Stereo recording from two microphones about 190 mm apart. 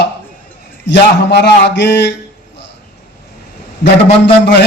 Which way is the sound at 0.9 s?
65° left (ahead or behind).